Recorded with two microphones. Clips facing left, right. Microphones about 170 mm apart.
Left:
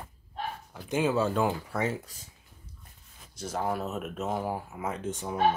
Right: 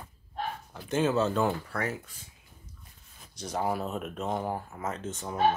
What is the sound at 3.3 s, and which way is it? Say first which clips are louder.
Speech: even; 5° left (ahead or behind).